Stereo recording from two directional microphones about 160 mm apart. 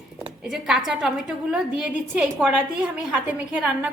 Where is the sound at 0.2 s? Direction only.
5° right (ahead or behind).